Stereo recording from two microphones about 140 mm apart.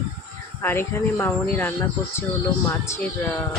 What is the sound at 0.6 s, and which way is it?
Speech, 15° left (ahead or behind).